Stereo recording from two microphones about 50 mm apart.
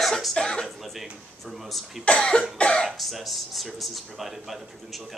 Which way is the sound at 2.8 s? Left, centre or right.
Centre.